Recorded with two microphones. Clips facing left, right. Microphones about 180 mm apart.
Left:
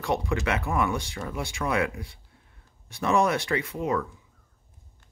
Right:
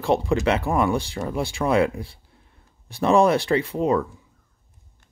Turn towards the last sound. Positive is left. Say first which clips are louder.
# right 6 dB
turn(degrees=-30)  # may be behind; listen again after turning